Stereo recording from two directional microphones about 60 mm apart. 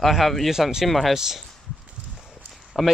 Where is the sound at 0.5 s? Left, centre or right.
Centre.